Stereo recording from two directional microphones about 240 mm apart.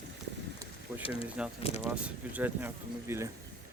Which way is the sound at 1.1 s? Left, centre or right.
Centre.